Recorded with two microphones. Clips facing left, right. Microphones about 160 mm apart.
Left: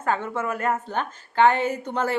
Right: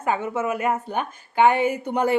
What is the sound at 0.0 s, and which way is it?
Speech, 10° right (ahead or behind).